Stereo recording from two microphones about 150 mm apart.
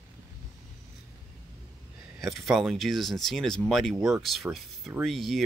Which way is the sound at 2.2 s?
Centre (ahead or behind).